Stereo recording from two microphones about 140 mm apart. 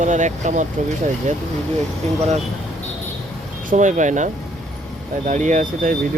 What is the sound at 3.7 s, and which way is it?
Speech, 60° right (ahead or behind).